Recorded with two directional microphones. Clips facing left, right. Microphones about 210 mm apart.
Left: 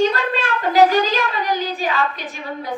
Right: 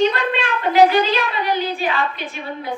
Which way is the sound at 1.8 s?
40° left (ahead or behind).